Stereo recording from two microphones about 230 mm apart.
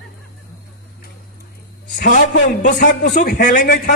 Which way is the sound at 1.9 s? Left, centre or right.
Left.